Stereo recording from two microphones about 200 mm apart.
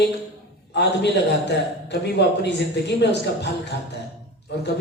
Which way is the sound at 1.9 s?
60° left (ahead or behind).